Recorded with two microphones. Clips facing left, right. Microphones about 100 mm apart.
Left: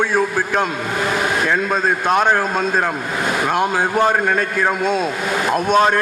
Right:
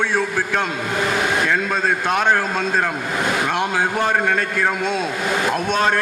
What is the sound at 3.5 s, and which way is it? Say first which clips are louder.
A man's voice: left 3 dB; 45° left (ahead or behind).